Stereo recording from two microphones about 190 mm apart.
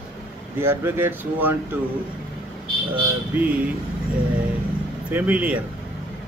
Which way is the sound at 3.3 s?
10° right (ahead or behind).